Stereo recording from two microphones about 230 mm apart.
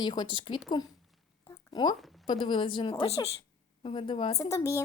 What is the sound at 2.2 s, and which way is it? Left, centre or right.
A woman's voice, left.